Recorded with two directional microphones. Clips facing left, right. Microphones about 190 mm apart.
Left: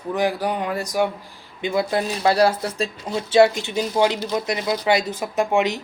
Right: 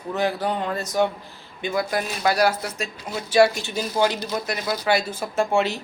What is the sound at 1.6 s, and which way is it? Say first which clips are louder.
Speech: left 3 dB; 25° left (ahead or behind).